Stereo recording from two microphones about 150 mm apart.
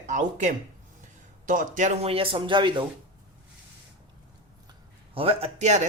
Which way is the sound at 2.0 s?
40° right (ahead or behind).